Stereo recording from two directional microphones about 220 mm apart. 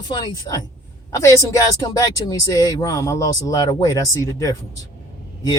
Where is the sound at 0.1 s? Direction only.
20° left (ahead or behind).